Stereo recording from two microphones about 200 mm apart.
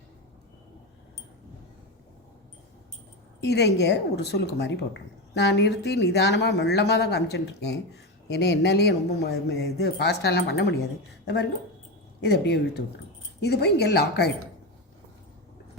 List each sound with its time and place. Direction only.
3.4 s speech: 55° left (ahead or behind)
12.2 s speech: 55° left (ahead or behind)